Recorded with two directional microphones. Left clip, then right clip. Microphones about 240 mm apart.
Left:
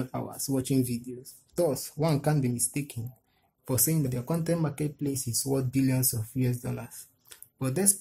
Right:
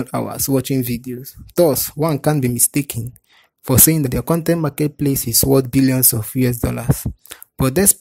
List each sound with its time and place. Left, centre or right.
0.0 s speech: right